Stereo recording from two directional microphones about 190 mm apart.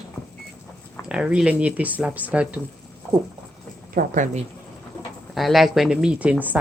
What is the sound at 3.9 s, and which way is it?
Speech, 45° right (ahead or behind).